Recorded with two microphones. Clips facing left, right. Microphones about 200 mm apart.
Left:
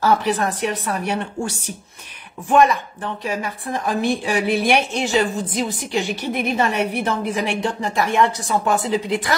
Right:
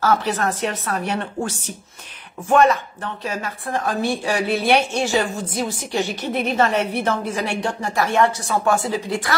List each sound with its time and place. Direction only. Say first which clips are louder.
0.0 s a woman's voice: left 1 dB; 15° left (ahead or behind)
3.3 s a woman's voice: left 1 dB; 15° left (ahead or behind)